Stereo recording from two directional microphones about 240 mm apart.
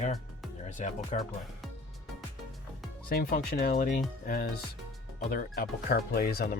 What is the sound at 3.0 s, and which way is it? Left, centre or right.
Speech, left.